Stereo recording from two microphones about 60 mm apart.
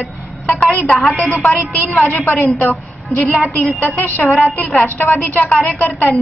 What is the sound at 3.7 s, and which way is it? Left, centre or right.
Speech, left.